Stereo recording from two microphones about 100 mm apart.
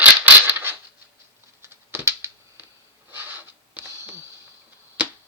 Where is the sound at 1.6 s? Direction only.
25° right (ahead or behind).